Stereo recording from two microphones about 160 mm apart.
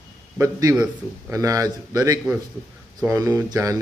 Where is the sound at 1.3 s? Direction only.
20° right (ahead or behind).